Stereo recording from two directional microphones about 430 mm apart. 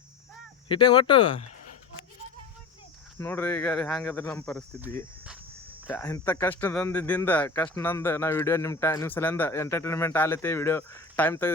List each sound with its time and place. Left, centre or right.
0.7 s speech: centre
3.2 s speech: centre